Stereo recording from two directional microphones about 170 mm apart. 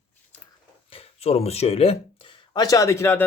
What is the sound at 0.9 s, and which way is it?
Speech, 35° left (ahead or behind).